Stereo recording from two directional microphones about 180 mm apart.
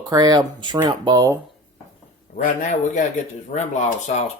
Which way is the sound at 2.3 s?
45° left (ahead or behind).